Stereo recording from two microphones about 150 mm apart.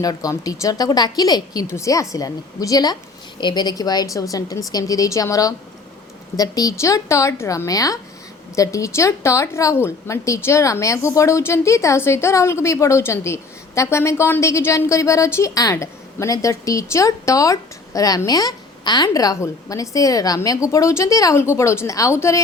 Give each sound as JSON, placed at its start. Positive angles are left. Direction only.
{"t": 0.0, "sound": "speech", "side_deg": 25}